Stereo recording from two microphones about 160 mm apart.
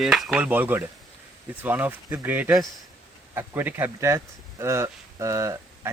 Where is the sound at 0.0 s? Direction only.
Centre (ahead or behind).